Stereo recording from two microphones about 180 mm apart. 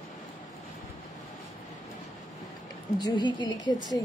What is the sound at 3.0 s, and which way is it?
Speech, 25° left (ahead or behind).